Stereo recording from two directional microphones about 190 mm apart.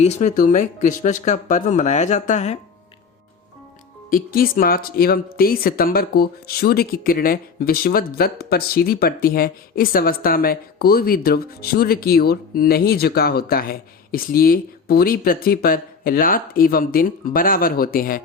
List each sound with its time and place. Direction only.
0.0 s speech: 35° left (ahead or behind)
4.1 s speech: 50° left (ahead or behind)